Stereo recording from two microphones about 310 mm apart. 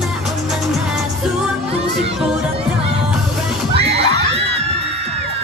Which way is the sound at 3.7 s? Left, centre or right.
Centre.